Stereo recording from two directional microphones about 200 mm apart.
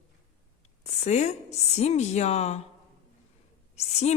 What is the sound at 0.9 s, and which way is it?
Speech, 35° left (ahead or behind).